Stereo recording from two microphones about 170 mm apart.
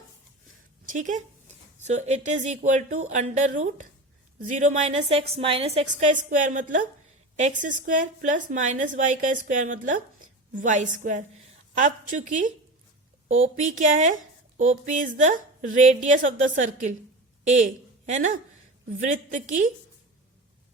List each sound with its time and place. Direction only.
0.9 s a woman's voice: 45° right (ahead or behind)